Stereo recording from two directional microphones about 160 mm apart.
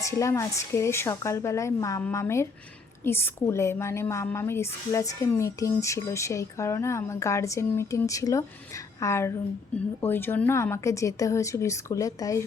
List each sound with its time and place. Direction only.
0.0 s a woman's voice: 20° left (ahead or behind)